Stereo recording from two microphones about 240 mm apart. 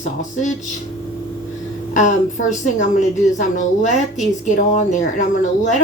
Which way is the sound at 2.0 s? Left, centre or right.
Left.